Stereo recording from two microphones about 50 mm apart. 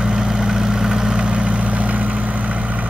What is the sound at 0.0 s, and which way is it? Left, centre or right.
Vehicle, centre.